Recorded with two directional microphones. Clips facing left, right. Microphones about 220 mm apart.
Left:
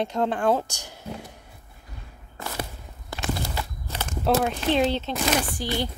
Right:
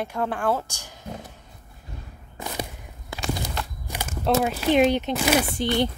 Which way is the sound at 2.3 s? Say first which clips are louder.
Right 1 dB; 15° right (ahead or behind).